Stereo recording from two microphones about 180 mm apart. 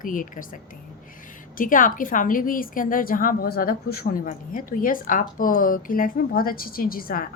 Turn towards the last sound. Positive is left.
turn(degrees=55)  # may be behind; listen again after turning